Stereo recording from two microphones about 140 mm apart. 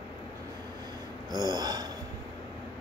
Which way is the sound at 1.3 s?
30° right (ahead or behind).